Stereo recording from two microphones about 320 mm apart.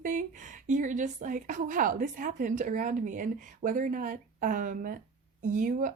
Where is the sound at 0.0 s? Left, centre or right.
Right.